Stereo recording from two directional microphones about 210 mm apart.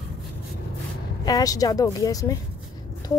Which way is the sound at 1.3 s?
15° left (ahead or behind).